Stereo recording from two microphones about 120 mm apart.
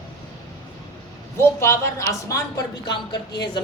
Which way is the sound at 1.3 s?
25° left (ahead or behind).